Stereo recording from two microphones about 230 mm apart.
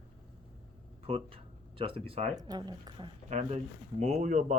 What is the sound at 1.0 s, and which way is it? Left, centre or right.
Speech, right.